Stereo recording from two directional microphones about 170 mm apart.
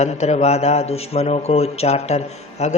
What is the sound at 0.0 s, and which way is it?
A man's voice, 40° left (ahead or behind).